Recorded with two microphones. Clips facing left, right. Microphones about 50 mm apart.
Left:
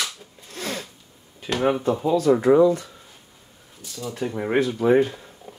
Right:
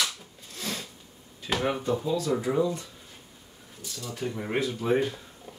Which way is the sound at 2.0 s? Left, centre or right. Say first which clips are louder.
Left 14 dB; left.